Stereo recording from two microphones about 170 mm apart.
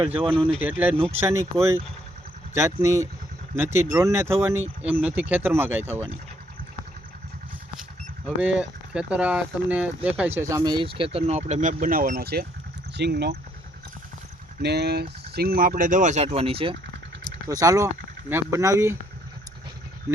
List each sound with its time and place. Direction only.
0.6 s speech: 10° right (ahead or behind)
8.4 s speech: 5° right (ahead or behind)
10.6 s speech: 25° right (ahead or behind); by 13.3 s 75° right (ahead or behind)
14.6 s speech: 75° right (ahead or behind); by 16.7 s 35° right (ahead or behind)
17.5 s speech: 20° right (ahead or behind)